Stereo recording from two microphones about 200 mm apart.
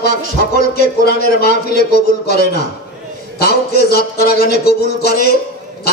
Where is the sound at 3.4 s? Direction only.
50° left (ahead or behind).